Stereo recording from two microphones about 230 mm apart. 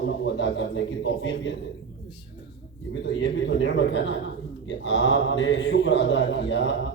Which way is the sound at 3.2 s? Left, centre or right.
Left.